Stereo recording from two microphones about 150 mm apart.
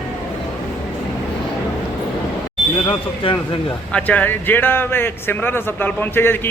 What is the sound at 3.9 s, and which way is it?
Speech, 10° left (ahead or behind).